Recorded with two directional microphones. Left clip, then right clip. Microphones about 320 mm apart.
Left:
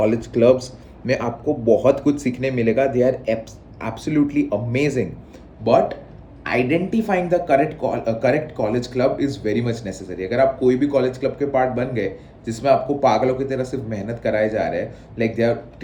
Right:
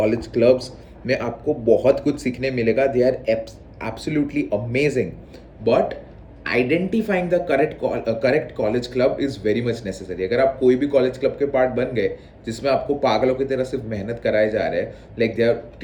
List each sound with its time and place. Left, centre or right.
0.0 s speech: centre